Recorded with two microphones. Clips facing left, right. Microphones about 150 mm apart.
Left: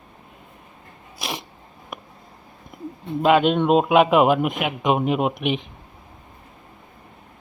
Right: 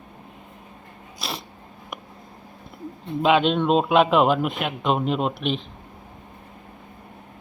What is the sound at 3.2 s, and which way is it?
A man's voice, 5° left (ahead or behind).